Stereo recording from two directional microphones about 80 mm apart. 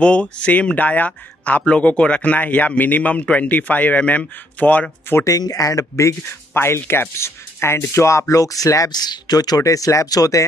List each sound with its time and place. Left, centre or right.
0.0 s speech: centre
5.2 s speech: left
8.9 s speech: left